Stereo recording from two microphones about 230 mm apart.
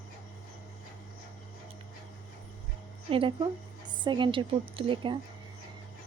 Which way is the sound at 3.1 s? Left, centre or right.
Right.